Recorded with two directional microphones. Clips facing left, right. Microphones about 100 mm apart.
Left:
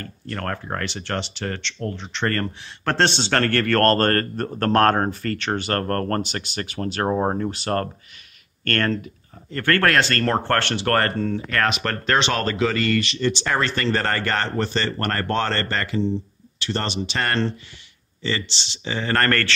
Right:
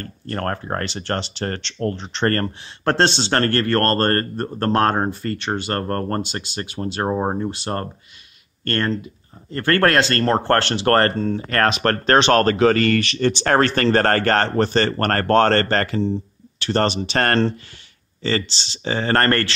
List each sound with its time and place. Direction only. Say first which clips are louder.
0.0 s speech: right 4 dB; 40° right (ahead or behind); by 8.9 s 20° right (ahead or behind)
9.5 s speech: right 2 dB; 30° right (ahead or behind)
11.4 s speech: right 7 dB; 40° right (ahead or behind)